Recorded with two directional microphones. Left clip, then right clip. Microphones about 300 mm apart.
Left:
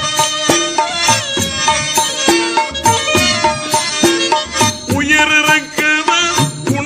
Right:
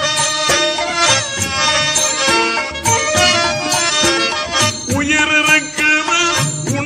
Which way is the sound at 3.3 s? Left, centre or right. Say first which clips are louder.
Left 1 dB; left.